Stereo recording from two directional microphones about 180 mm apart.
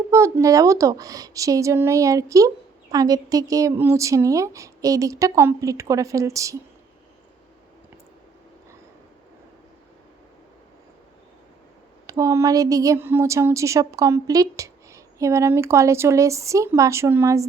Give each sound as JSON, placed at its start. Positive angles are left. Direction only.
{"t": 0.1, "sound": "a woman's voice", "side_deg": -15}
{"t": 12.0, "sound": "a woman's voice", "side_deg": -20}